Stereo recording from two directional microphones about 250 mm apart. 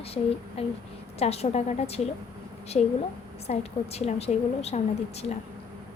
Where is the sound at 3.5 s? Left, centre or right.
Left.